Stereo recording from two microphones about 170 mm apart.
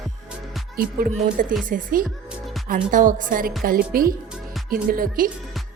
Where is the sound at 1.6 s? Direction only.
50° right (ahead or behind).